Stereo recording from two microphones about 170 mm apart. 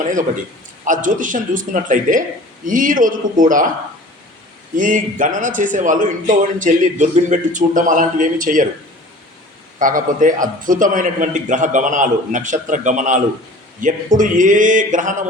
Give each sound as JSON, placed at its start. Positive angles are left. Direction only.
{"t": 0.9, "sound": "a man's voice", "side_deg": -50}
{"t": 4.7, "sound": "a man's voice", "side_deg": -50}
{"t": 9.7, "sound": "a man's voice", "side_deg": -50}